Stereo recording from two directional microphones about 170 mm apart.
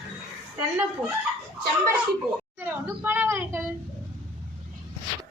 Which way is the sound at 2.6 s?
15° right (ahead or behind).